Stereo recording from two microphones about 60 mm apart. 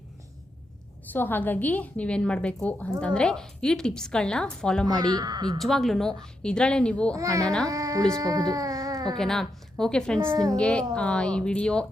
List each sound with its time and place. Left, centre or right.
1.1 s a woman's voice: left
3.2 s a woman's voice: centre
4.9 s speech: right
5.5 s a woman's voice: centre
7.1 s a child's voice: right
7.4 s a woman's voice: centre
7.7 s speech: right
8.1 s speech: right
9.1 s a woman's voice: centre
10.3 s speech: right
10.6 s a woman's voice: centre